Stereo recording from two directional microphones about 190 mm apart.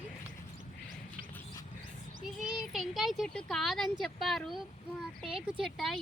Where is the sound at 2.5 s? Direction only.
Centre (ahead or behind).